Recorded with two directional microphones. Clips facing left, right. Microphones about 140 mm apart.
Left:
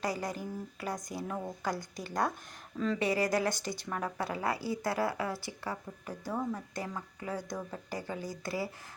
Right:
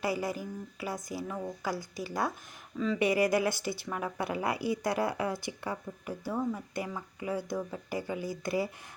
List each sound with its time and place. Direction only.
0.0 s a woman's voice: 10° right (ahead or behind)
3.0 s a woman's voice: 15° right (ahead or behind)